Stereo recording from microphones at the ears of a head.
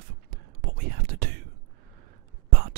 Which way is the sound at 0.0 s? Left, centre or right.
Right.